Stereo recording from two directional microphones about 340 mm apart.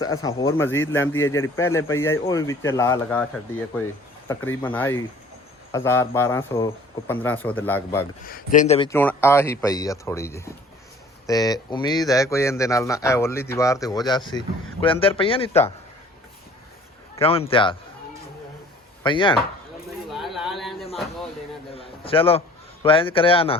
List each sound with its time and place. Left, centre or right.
0.0 s speech: centre
4.3 s speech: centre
8.3 s speech: left
17.2 s speech: centre
19.0 s speech: centre
20.1 s a sound: centre
21.8 s a man's voice: centre